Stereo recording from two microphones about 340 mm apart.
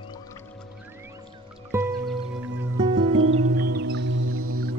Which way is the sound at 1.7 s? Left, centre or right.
Centre.